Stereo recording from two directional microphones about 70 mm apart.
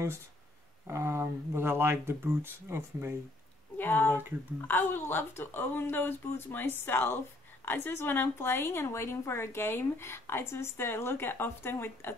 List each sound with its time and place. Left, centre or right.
0.8 s speech: right
3.7 s a woman's voice: left